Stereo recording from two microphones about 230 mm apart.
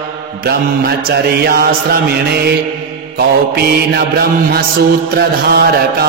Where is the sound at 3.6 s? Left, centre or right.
Right.